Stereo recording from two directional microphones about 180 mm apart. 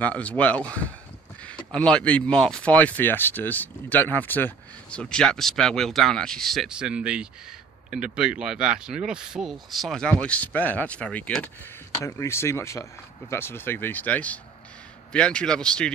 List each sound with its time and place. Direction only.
0.0 s speech: 10° left (ahead or behind)